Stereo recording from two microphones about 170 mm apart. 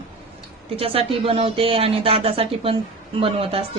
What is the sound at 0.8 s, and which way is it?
A woman's voice, 35° right (ahead or behind).